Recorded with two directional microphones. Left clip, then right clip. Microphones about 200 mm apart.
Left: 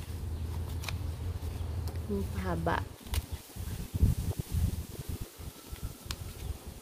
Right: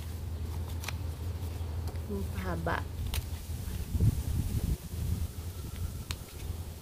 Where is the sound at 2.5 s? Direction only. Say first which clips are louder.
Left 2 dB; 30° left (ahead or behind).